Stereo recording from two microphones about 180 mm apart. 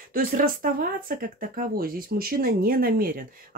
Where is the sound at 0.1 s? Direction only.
55° right (ahead or behind).